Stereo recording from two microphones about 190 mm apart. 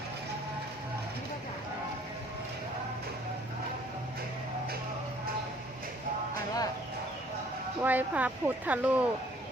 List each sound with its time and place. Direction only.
7.8 s speech: 10° right (ahead or behind)